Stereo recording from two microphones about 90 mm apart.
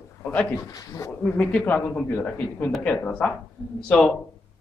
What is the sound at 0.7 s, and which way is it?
Speech, 40° left (ahead or behind).